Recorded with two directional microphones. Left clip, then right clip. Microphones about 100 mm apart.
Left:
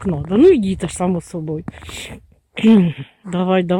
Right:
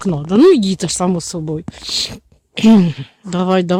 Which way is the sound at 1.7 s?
25° right (ahead or behind).